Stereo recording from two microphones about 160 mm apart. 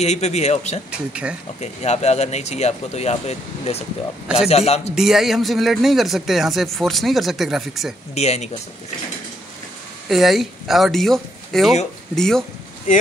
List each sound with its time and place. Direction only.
0.0 s speech: 45° left (ahead or behind)
0.9 s speech: 5° right (ahead or behind)
1.6 s a man's voice: 45° left (ahead or behind)
4.9 s speech: centre (ahead or behind)
8.1 s a man's voice: 40° left (ahead or behind)
10.0 s speech: centre (ahead or behind)